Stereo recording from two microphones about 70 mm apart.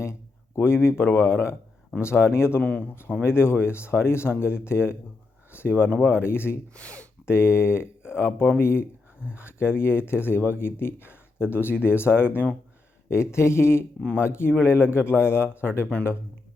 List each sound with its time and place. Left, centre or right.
0.0 s speech: left
2.6 s speech: centre
3.2 s speech: left
6.7 s speech: centre
7.3 s speech: left